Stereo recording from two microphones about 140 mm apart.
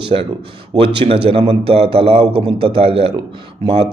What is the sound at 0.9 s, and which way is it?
A man's voice, 45° right (ahead or behind).